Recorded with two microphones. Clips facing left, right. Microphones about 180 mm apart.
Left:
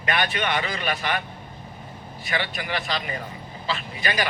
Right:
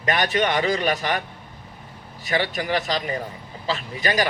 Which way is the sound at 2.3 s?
40° right (ahead or behind).